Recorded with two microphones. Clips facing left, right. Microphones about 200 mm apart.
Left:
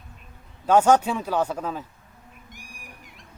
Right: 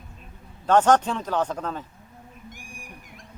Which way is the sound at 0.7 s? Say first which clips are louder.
Left 1 dB; 10° left (ahead or behind).